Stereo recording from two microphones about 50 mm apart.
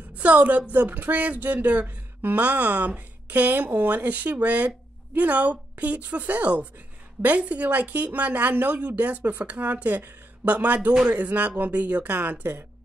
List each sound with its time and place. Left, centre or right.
0.1 s speech: right